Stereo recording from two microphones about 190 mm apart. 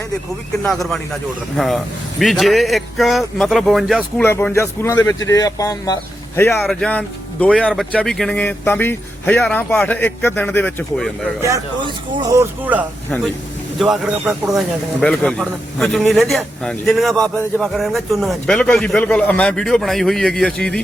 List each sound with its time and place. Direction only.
0.6 s a man's voice: centre (ahead or behind)
4.2 s speech: 10° left (ahead or behind)
6.6 s speech: 5° left (ahead or behind)
11.4 s speech: 20° right (ahead or behind)
13.7 s a man's voice: centre (ahead or behind)